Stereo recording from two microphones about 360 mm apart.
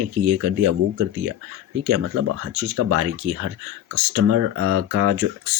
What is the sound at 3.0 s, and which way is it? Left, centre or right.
Speech, right.